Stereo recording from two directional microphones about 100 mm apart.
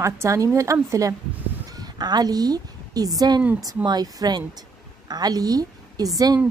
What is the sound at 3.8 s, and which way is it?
A woman's voice, 40° right (ahead or behind).